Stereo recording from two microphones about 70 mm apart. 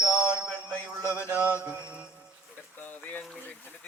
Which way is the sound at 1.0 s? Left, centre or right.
Left.